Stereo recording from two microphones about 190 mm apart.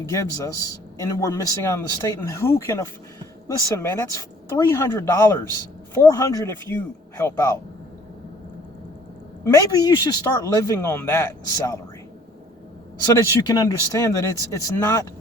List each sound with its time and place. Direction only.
0.0 s speech: 15° left (ahead or behind)
9.4 s speech: 20° left (ahead or behind)
13.1 s speech: 20° left (ahead or behind)